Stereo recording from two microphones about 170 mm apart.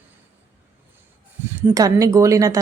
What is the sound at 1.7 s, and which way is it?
Speech, 20° right (ahead or behind).